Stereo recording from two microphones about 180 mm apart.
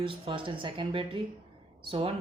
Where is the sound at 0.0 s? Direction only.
30° right (ahead or behind).